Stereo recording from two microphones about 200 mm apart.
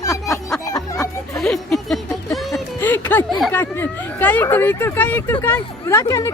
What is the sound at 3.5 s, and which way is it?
Speech, 10° left (ahead or behind).